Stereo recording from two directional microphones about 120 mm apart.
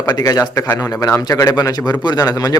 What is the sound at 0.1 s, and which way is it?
A man's voice, 30° left (ahead or behind).